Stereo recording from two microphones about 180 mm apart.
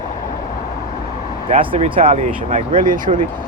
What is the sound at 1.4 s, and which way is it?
Speech, 30° right (ahead or behind).